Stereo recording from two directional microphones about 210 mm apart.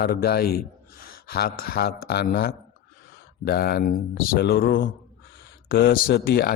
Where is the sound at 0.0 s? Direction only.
50° left (ahead or behind).